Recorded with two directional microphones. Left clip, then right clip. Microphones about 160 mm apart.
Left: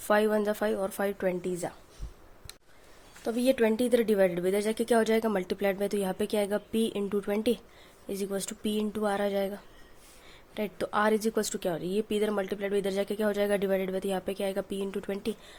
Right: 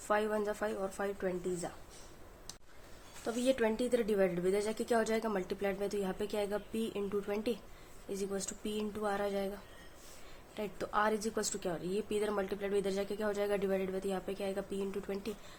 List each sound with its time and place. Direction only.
0.1 s a woman's voice: 50° left (ahead or behind)
3.2 s a woman's voice: 45° left (ahead or behind)
10.5 s a woman's voice: 45° left (ahead or behind)